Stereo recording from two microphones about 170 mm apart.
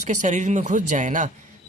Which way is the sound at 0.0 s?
45° right (ahead or behind).